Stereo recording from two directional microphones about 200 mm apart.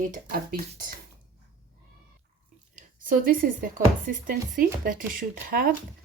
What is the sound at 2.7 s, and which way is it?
Speech, 45° right (ahead or behind).